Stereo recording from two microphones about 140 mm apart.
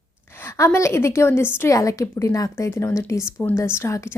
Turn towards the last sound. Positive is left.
turn(degrees=20)  # may be behind; listen again after turning